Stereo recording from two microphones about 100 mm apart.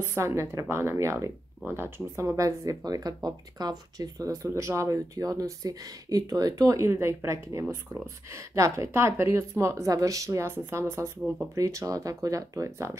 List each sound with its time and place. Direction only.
0.0 s speech: 30° right (ahead or behind)